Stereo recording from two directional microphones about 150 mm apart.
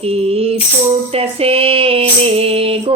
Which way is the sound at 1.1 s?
40° right (ahead or behind).